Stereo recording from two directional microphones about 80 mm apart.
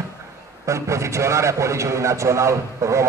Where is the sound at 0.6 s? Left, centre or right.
Right.